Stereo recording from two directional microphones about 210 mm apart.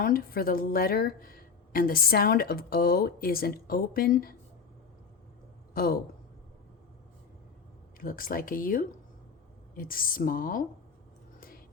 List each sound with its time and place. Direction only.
0.0 s speech: 45° left (ahead or behind)
5.7 s a man's voice: 45° left (ahead or behind)
7.9 s a woman's voice: 45° left (ahead or behind)
11.3 s whispering: 45° left (ahead or behind)